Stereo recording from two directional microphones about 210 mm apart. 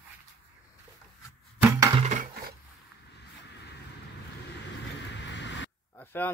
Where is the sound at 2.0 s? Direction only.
40° right (ahead or behind).